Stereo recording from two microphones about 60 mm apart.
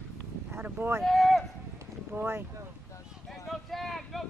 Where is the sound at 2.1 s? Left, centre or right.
Right.